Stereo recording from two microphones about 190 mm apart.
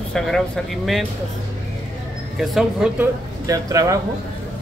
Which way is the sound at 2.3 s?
Centre (ahead or behind).